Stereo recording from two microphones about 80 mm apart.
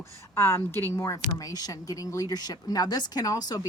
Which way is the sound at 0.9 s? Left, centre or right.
Left.